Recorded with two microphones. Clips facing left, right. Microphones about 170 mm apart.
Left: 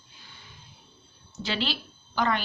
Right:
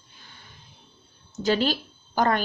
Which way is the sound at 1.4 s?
45° right (ahead or behind).